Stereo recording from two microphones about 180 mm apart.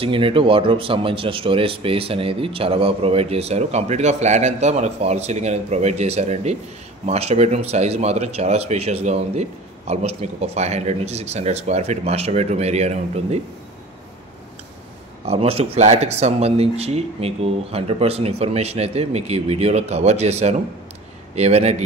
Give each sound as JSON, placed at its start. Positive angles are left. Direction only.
{"t": 0.0, "sound": "speech", "side_deg": -30}
{"t": 15.2, "sound": "speech", "side_deg": -35}